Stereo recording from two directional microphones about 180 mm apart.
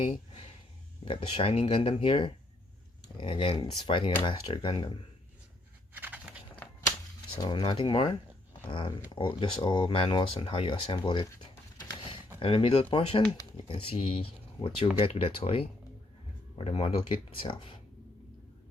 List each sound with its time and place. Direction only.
1.0 s speech: 30° left (ahead or behind)
5.9 s a sound: 10° right (ahead or behind)
7.3 s speech: 25° left (ahead or behind)
9.1 s speech: 25° left (ahead or behind)
11.8 s a sound: 25° left (ahead or behind)
12.4 s speech: 30° left (ahead or behind)